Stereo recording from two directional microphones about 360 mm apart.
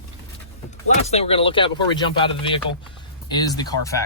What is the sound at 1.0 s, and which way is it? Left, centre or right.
Speech, centre.